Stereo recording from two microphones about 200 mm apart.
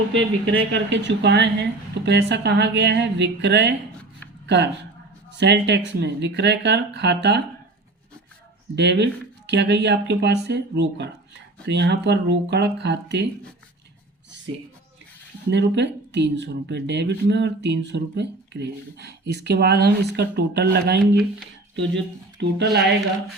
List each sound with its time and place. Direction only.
0.1 s speech: 65° right (ahead or behind)
8.7 s speech: 60° right (ahead or behind)
15.4 s speech: 60° right (ahead or behind)